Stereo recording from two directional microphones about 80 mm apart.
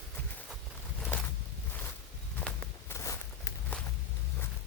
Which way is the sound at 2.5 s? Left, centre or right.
Centre.